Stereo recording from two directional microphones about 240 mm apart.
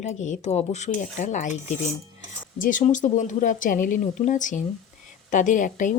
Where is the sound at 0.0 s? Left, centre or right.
Left.